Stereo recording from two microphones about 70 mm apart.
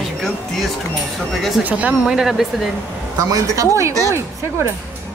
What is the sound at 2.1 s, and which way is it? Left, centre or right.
Speech, centre.